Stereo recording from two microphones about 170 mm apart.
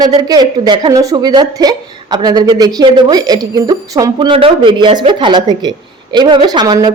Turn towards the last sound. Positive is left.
turn(degrees=-25)  # may be behind; listen again after turning